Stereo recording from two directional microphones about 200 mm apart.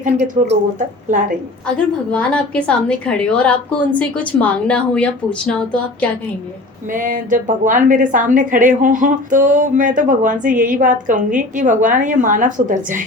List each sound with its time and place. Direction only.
0.4 s a woman's voice: 40° right (ahead or behind)
2.0 s a woman's voice: 5° left (ahead or behind)
6.9 s a woman's voice: 40° right (ahead or behind)